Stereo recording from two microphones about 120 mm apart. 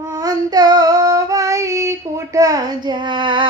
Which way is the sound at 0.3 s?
35° right (ahead or behind).